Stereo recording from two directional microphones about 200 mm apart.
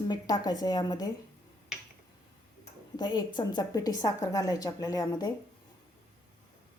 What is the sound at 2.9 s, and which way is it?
A woman's voice, 20° left (ahead or behind).